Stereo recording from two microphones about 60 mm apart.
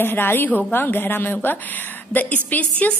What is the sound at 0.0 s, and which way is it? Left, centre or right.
A woman's voice, left.